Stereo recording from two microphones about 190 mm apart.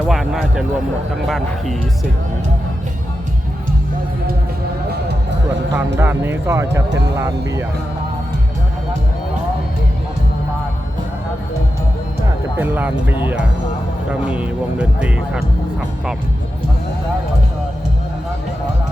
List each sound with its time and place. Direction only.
0.1 s speech: centre (ahead or behind)
5.7 s speech: 10° right (ahead or behind)
12.5 s speech: 10° right (ahead or behind)